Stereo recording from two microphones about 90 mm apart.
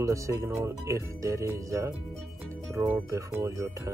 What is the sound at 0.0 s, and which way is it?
Speech, 35° right (ahead or behind).